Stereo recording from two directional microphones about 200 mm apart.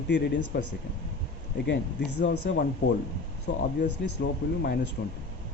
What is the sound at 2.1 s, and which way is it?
Speech, 60° left (ahead or behind).